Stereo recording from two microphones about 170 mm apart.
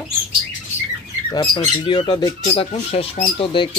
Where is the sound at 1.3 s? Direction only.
30° left (ahead or behind).